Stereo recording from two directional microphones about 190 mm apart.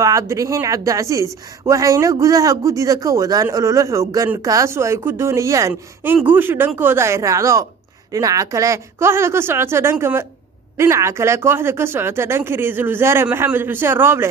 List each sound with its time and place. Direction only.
0.0 s speech: 15° right (ahead or behind)